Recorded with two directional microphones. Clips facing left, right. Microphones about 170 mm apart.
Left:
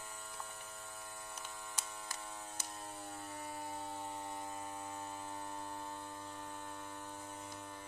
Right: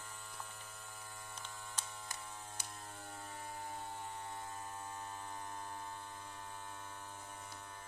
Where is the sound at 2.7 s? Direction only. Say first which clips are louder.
Left 3 dB; 20° left (ahead or behind).